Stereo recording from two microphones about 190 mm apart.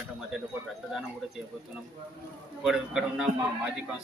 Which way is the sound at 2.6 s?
5° right (ahead or behind).